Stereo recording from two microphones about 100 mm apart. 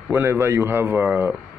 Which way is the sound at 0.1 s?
25° right (ahead or behind).